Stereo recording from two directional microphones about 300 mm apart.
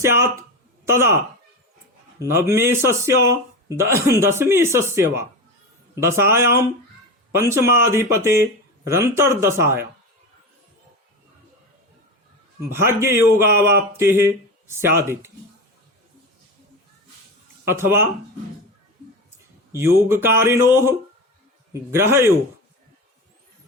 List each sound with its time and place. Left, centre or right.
0.0 s speech: centre
2.1 s speech: centre
12.7 s speech: centre
17.7 s speech: centre
19.7 s speech: centre
21.7 s speech: centre